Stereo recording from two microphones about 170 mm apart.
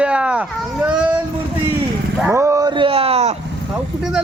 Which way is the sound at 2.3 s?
15° right (ahead or behind).